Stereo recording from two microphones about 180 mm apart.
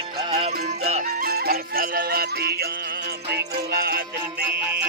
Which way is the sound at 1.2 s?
55° right (ahead or behind).